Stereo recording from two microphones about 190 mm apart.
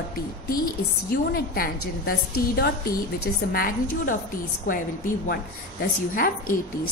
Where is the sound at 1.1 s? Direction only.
55° left (ahead or behind).